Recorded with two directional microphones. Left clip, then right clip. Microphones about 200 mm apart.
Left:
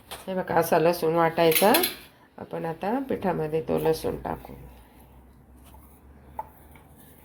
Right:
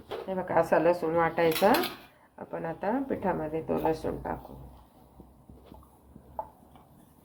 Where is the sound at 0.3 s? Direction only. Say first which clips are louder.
Left 2 dB; 45° left (ahead or behind).